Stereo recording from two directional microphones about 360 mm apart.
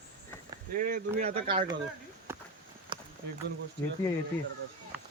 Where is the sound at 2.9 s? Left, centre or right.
Centre.